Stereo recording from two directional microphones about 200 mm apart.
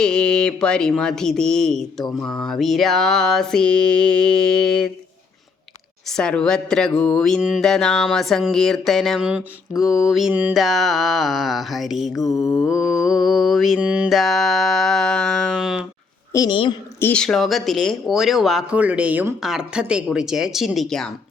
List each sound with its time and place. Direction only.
0.0 s speech: 5° left (ahead or behind)
6.1 s speech: 5° left (ahead or behind)
16.3 s a woman's voice: 20° left (ahead or behind)
17.0 s speech: 5° left (ahead or behind)